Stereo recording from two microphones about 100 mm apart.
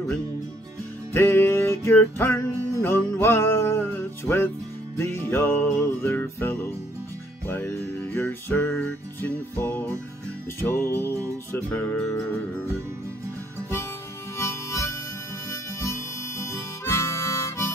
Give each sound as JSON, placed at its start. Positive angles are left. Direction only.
{"t": 1.1, "sound": "music", "side_deg": 25}
{"t": 14.4, "sound": "harmonica", "side_deg": 25}